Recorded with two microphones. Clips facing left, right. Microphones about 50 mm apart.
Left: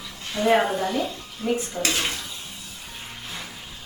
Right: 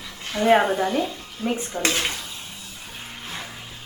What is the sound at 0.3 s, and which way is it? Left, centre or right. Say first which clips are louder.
Speech: right 2 dB; right.